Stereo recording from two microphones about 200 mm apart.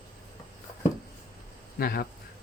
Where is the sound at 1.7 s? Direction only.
50° left (ahead or behind).